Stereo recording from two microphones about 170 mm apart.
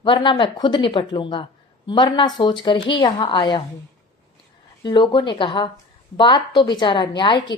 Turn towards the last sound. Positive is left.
turn(degrees=30)  # may be behind; listen again after turning